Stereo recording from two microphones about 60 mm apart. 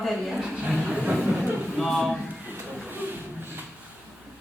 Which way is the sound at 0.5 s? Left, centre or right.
Centre.